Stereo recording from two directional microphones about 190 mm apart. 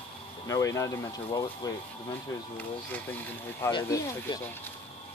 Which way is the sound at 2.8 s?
10° left (ahead or behind).